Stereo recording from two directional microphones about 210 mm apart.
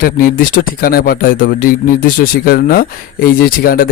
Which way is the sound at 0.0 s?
40° left (ahead or behind).